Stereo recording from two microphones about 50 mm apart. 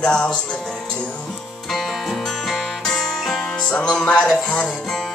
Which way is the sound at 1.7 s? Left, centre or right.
Centre.